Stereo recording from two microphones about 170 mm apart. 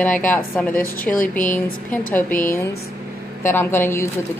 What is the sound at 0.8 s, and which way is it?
Speech, 55° left (ahead or behind).